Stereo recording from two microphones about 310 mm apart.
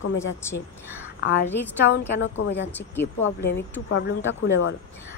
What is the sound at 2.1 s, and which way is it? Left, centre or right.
Speech, left.